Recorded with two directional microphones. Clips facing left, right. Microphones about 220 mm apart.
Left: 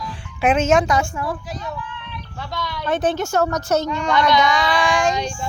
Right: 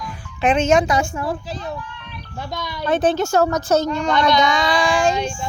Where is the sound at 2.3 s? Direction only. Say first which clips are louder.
Right 3 dB; 45° right (ahead or behind).